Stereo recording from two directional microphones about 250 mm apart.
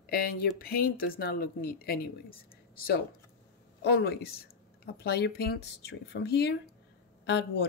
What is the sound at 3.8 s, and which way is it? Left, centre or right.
Speech, left.